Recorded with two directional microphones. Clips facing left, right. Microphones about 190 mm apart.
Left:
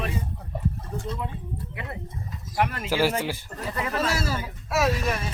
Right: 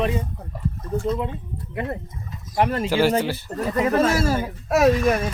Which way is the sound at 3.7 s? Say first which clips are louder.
Right 10 dB; 35° right (ahead or behind).